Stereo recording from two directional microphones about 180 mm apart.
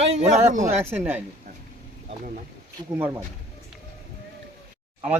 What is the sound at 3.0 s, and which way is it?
Speech, 10° right (ahead or behind).